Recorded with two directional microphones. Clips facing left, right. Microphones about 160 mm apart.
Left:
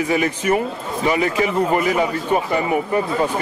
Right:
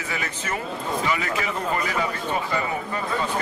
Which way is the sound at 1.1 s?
25° left (ahead or behind).